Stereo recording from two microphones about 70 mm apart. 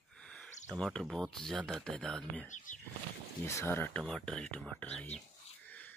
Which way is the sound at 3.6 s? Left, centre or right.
Left.